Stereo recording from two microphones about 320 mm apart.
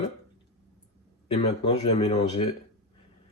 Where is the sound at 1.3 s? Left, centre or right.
Centre.